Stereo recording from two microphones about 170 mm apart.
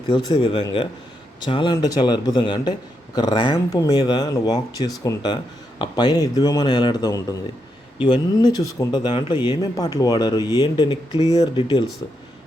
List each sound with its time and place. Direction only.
0.1 s a man's voice: 30° left (ahead or behind)